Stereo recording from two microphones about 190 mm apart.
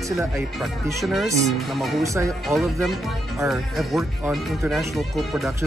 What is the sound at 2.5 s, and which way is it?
Speech, centre (ahead or behind).